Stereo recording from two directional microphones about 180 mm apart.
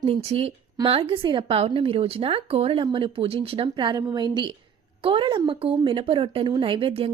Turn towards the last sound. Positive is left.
turn(degrees=-30)  # may be behind; listen again after turning